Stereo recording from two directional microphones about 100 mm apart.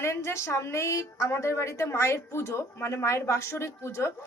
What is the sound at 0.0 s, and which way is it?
A woman's voice, 25° left (ahead or behind).